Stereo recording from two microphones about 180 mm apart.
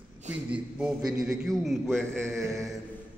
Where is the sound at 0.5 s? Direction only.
Centre (ahead or behind).